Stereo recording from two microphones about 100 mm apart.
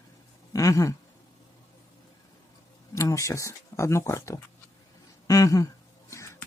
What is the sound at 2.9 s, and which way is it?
Speech, 30° left (ahead or behind).